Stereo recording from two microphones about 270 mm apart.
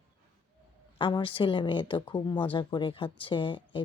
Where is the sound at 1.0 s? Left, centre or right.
Centre.